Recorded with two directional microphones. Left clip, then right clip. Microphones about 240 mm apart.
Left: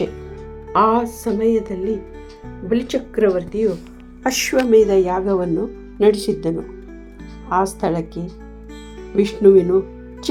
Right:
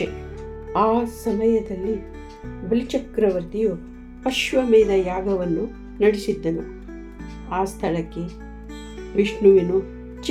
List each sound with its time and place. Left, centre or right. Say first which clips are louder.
0.7 s music: left 4 dB; centre
4.2 s speech: left 3 dB; centre
5.5 s music: left 3 dB; centre
6.0 s speech: left 4 dB; left
7.5 s speech: left 5 dB; left
9.6 s music: left 5 dB; centre